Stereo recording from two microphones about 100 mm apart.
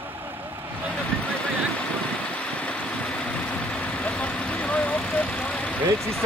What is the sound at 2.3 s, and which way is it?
Vehicle, 10° left (ahead or behind).